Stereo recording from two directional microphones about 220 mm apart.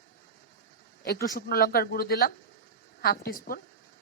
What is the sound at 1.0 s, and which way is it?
A woman's voice, 45° left (ahead or behind).